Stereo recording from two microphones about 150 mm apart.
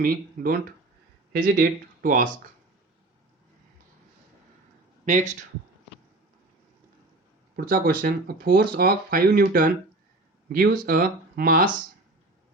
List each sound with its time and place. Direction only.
0.0 s speech: 70° right (ahead or behind)
5.0 s speech: 55° right (ahead or behind)
7.5 s speech: 85° right